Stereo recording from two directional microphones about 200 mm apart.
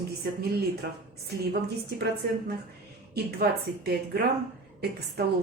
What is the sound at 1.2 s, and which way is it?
Speech, 55° right (ahead or behind).